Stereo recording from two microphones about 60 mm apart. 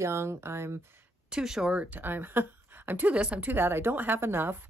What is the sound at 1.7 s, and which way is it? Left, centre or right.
Speech, right.